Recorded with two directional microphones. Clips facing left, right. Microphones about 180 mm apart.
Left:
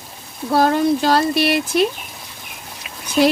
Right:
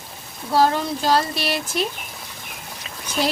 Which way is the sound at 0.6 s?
60° left (ahead or behind).